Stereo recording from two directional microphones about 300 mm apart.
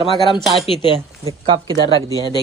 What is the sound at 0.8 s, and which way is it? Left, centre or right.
Speech, centre.